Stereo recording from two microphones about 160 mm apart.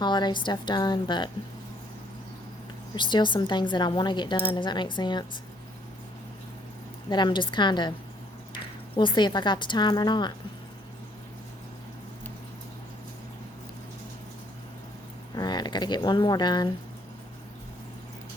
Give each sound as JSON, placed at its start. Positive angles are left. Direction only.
{"t": 0.0, "sound": "speech", "side_deg": 30}
{"t": 2.9, "sound": "speech", "side_deg": 30}
{"t": 7.1, "sound": "speech", "side_deg": 30}
{"t": 9.0, "sound": "speech", "side_deg": 30}
{"t": 15.4, "sound": "speech", "side_deg": 25}